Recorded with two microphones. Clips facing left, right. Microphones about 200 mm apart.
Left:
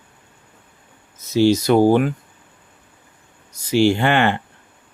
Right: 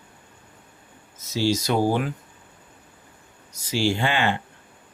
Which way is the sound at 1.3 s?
60° left (ahead or behind).